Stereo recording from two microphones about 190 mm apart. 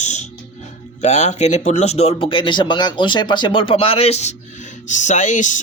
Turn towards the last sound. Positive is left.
turn(degrees=40)  # may be behind; listen again after turning